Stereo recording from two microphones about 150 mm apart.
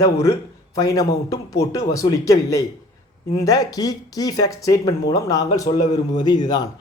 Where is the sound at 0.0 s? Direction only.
25° left (ahead or behind).